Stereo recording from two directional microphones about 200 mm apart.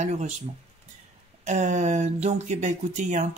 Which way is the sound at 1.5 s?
35° right (ahead or behind).